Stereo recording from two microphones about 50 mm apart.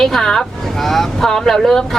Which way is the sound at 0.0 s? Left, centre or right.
Centre.